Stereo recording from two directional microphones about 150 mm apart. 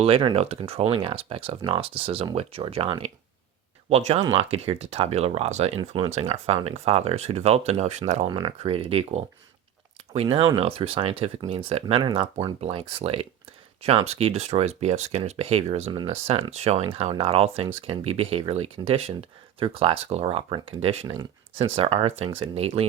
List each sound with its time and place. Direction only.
0.0 s speech: 35° right (ahead or behind)
8.3 s speech: 30° right (ahead or behind)